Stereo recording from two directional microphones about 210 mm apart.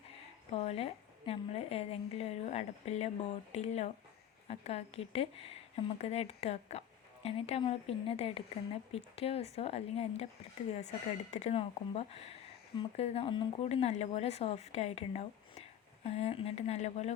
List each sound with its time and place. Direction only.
0.5 s speech: 30° left (ahead or behind)